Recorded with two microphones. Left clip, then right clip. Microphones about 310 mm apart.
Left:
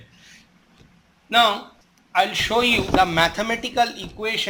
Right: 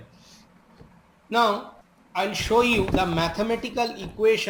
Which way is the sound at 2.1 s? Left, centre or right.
Centre.